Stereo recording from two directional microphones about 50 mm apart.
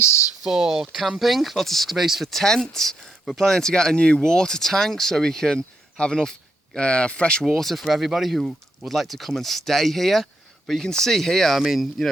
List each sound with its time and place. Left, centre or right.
0.4 s speech: centre
2.0 s speech: centre
7.4 s speech: centre